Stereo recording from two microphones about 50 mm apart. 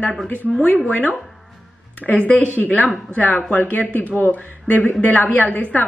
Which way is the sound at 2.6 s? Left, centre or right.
Left.